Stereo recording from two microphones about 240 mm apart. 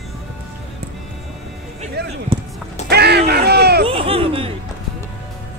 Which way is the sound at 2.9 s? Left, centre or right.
Right.